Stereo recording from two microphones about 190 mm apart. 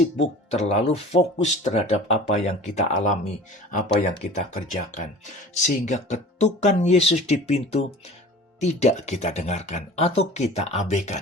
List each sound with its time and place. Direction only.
0.2 s speech: 35° left (ahead or behind)